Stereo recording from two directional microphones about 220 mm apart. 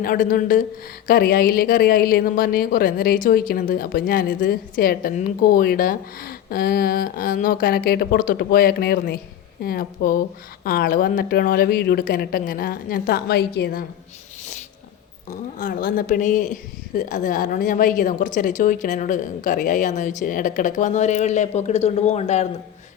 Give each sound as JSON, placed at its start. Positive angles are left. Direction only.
{"t": 0.0, "sound": "a woman's voice", "side_deg": 40}
{"t": 15.5, "sound": "a woman's voice", "side_deg": 40}